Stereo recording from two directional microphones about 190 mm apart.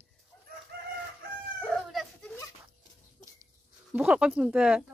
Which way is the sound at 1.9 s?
Centre (ahead or behind).